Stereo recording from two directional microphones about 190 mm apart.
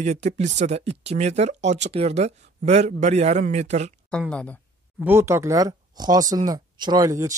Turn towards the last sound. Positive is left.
turn(degrees=-20)  # may be behind; listen again after turning